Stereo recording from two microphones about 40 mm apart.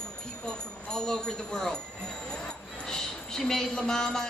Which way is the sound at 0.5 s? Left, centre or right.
Centre.